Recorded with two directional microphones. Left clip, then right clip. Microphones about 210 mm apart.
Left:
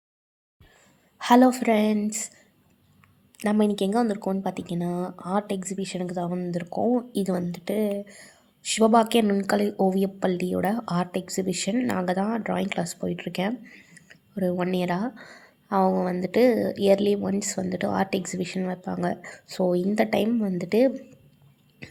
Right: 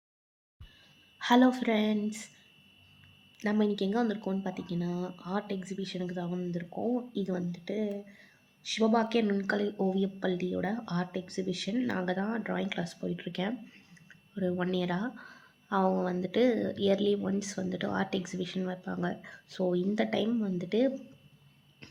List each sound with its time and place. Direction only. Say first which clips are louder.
1.2 s speech: left 7 dB; 30° left (ahead or behind)
3.3 s speech: left 6 dB; 30° left (ahead or behind)